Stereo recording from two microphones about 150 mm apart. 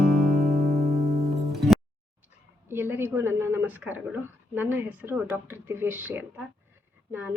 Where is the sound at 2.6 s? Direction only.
15° right (ahead or behind).